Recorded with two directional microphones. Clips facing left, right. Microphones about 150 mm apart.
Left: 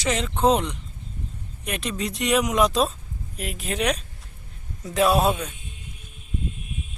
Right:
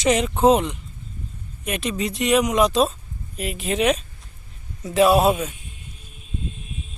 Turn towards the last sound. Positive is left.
turn(degrees=0)  # may be behind; listen again after turning